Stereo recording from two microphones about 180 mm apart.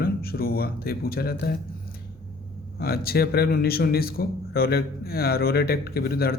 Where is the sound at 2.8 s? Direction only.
60° left (ahead or behind).